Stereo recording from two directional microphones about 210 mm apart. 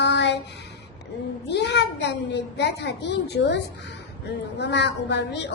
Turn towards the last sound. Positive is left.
turn(degrees=55)  # may be behind; listen again after turning